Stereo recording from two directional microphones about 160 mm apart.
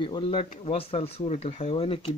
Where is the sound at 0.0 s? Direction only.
30° left (ahead or behind).